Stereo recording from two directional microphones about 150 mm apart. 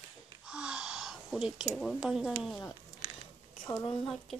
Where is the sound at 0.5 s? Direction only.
5° right (ahead or behind).